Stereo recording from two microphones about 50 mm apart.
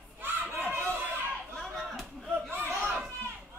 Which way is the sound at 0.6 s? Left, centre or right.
Right.